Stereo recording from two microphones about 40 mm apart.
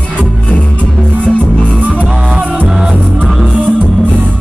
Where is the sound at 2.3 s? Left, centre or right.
Right.